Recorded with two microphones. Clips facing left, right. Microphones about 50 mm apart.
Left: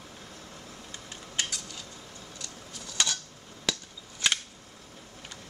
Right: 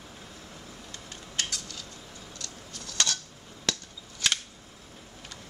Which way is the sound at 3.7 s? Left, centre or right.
Centre.